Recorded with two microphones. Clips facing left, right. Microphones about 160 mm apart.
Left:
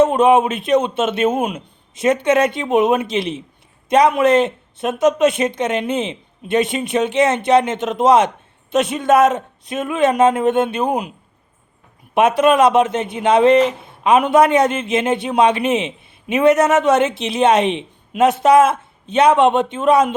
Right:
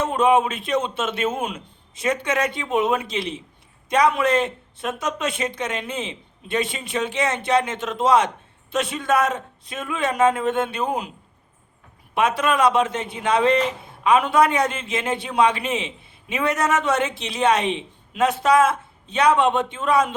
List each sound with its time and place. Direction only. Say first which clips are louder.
0.0 s speech: left 6 dB; 20° left (ahead or behind)
12.1 s speech: left 7 dB; 20° left (ahead or behind)